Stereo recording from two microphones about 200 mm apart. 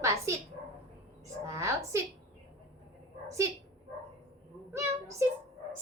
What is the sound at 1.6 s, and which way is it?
Speech, 15° right (ahead or behind).